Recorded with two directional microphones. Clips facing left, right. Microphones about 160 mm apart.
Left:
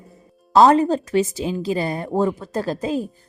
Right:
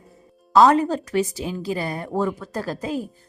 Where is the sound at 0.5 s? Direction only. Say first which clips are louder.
Left 2 dB; 30° left (ahead or behind).